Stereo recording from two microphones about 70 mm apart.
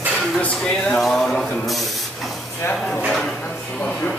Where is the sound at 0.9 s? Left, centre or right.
Centre.